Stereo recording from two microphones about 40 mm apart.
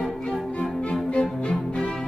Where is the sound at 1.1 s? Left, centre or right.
Left.